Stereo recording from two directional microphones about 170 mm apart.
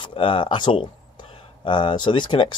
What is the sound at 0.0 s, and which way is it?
Speech, 30° left (ahead or behind).